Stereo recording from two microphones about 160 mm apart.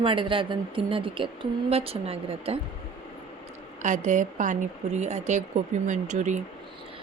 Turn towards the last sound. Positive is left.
turn(degrees=-50)  # may be behind; listen again after turning